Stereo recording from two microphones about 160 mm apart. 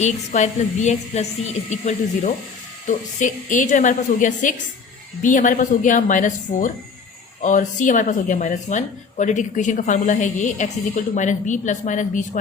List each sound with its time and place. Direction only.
0.0 s speech: 45° left (ahead or behind)